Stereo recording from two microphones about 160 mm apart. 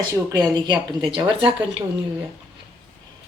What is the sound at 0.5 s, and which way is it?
Speech, 25° right (ahead or behind).